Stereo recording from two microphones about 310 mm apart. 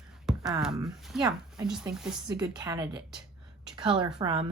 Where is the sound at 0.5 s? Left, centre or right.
Centre.